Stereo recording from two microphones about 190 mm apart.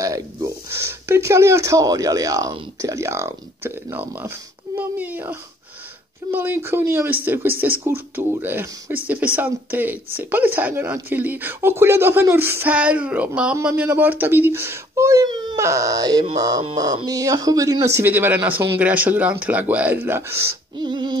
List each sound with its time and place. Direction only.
0.0 s speech: 15° right (ahead or behind)
20.7 s female singing: 25° right (ahead or behind)